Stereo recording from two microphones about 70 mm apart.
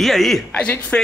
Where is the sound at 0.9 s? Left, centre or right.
Left.